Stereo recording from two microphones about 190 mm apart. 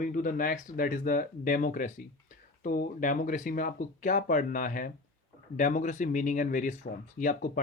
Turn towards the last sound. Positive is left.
turn(degrees=45)  # may be behind; listen again after turning